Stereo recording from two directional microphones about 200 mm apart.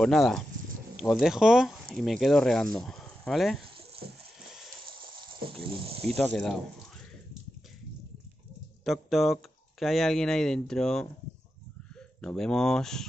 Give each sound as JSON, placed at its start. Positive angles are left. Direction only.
{"t": 0.0, "sound": "speech", "side_deg": 0}
{"t": 4.9, "sound": "snake", "side_deg": -25}
{"t": 6.0, "sound": "speech", "side_deg": 5}
{"t": 8.8, "sound": "speech", "side_deg": 0}
{"t": 12.2, "sound": "speech", "side_deg": 5}